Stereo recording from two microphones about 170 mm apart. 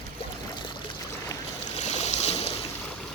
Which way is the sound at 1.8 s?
40° left (ahead or behind).